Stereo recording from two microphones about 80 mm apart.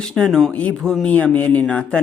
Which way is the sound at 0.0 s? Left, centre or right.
Centre.